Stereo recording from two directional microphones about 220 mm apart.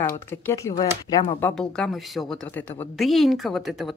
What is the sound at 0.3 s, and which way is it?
Speech, 10° left (ahead or behind).